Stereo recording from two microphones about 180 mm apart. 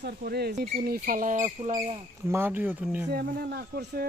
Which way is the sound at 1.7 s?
25° right (ahead or behind).